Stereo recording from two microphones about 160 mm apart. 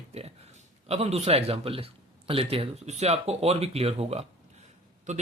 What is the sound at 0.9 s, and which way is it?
A man's voice, 40° right (ahead or behind).